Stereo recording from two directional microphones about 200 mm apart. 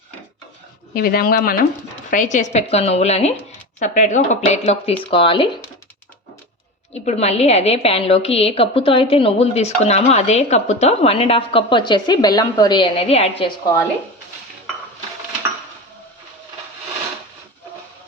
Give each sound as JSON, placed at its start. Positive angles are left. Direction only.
{"t": 0.9, "sound": "speech", "side_deg": 50}
{"t": 6.9, "sound": "a woman's voice", "side_deg": 35}